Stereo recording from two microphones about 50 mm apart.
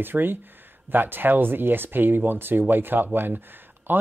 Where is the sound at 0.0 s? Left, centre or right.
Right.